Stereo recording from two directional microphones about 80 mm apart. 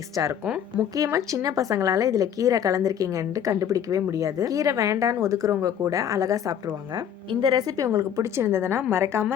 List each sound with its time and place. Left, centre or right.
0.2 s a woman's voice: right
7.3 s a woman's voice: right
7.9 s a woman's voice: right
8.4 s a woman's voice: right